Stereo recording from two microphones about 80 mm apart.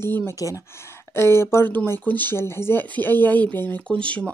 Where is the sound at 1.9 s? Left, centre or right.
Left.